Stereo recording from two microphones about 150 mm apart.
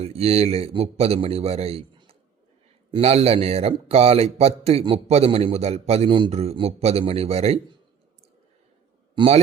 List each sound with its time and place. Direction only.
0.0 s a man's voice: 40° right (ahead or behind)
9.1 s a man's voice: 40° right (ahead or behind)